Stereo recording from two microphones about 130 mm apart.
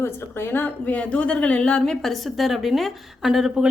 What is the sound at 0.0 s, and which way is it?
A woman's voice, 20° left (ahead or behind).